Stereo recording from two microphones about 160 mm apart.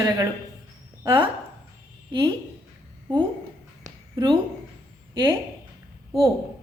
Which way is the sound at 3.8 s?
25° right (ahead or behind).